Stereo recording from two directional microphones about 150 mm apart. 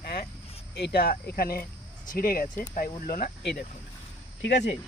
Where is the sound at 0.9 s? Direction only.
90° left.